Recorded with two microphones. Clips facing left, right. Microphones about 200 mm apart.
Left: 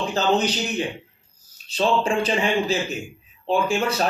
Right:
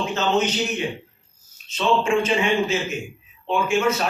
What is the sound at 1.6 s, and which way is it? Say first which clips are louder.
A man's voice: even; 35° left (ahead or behind).